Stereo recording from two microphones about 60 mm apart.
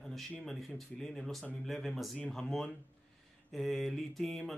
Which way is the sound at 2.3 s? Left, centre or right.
Centre.